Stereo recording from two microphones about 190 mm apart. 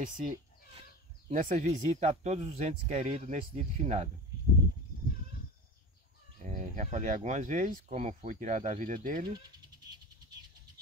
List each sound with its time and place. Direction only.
0.0 s speech: 45° right (ahead or behind)
6.4 s speech: 40° right (ahead or behind)